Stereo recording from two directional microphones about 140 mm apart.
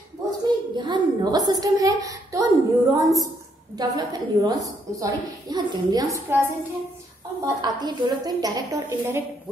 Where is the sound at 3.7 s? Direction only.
25° right (ahead or behind).